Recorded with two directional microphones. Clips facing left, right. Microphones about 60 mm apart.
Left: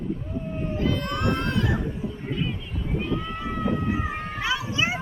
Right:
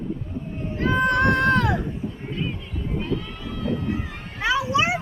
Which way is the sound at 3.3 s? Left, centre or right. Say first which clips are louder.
Left 1 dB; left.